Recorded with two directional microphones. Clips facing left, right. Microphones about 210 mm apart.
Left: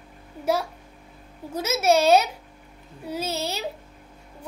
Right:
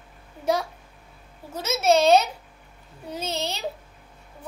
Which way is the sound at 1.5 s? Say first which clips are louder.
Even; 10° left (ahead or behind).